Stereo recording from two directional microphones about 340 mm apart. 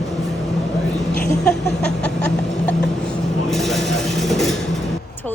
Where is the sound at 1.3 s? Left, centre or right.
Centre.